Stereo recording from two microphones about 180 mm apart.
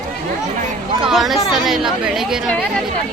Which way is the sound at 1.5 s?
5° right (ahead or behind).